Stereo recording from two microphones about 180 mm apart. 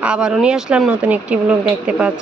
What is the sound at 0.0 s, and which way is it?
Speech, 5° right (ahead or behind).